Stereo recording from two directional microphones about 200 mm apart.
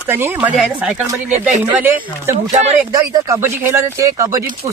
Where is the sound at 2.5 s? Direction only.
35° right (ahead or behind).